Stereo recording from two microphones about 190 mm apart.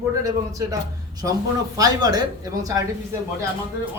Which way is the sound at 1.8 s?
20° right (ahead or behind).